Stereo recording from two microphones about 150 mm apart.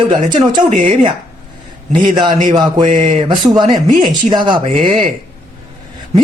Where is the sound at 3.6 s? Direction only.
30° right (ahead or behind).